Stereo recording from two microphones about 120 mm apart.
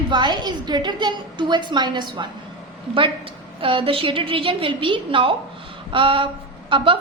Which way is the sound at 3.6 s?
50° right (ahead or behind).